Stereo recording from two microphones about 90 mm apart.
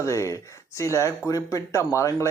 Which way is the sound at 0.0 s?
35° left (ahead or behind).